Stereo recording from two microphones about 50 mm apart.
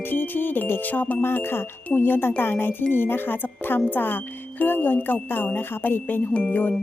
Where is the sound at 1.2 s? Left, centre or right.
Left.